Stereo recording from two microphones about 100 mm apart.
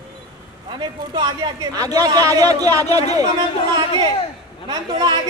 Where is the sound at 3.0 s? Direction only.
90° left.